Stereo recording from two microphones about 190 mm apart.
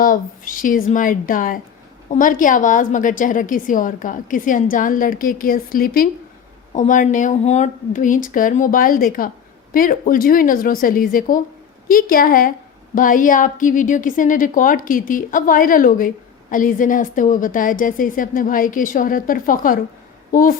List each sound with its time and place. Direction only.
0.0 s a woman's voice: 45° left (ahead or behind)